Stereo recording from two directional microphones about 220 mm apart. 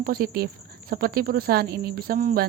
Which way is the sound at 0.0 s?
40° right (ahead or behind).